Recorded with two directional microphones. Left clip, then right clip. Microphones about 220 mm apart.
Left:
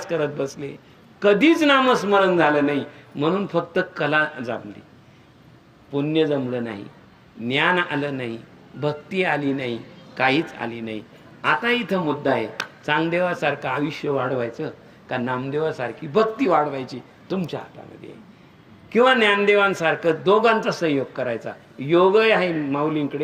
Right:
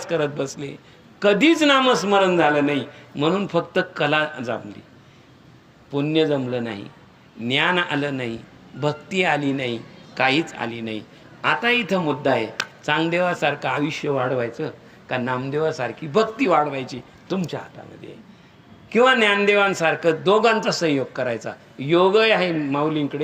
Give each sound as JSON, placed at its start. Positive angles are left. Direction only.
{"t": 0.0, "sound": "a man's voice", "side_deg": -25}
{"t": 5.9, "sound": "a man's voice", "side_deg": -25}